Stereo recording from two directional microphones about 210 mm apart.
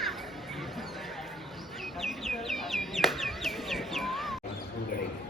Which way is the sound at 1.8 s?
Centre (ahead or behind).